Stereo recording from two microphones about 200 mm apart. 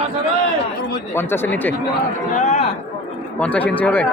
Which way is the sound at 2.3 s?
35° left (ahead or behind).